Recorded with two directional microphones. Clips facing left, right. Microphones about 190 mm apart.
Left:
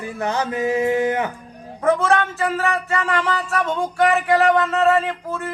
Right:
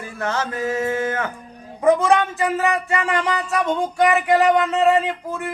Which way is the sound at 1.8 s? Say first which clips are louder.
Right 2 dB; 15° right (ahead or behind).